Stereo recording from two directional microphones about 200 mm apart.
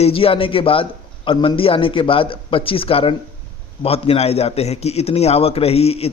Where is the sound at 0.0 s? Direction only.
30° left (ahead or behind).